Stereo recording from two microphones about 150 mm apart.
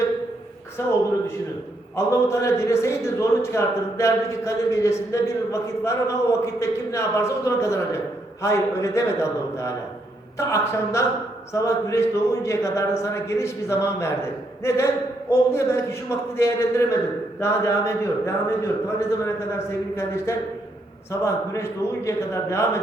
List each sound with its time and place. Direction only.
0.8 s a man's voice: 20° left (ahead or behind)
2.0 s a man's voice: 20° left (ahead or behind)